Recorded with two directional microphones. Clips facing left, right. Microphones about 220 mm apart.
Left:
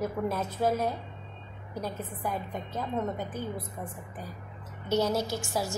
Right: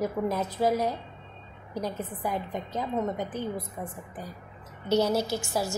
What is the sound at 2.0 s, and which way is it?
Speech, 15° right (ahead or behind).